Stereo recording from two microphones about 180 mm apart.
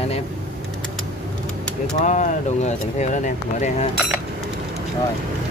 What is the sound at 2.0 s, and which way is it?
Speech, 40° left (ahead or behind).